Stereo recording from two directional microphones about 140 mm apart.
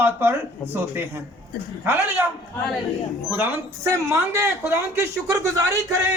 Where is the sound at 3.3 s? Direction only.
20° right (ahead or behind).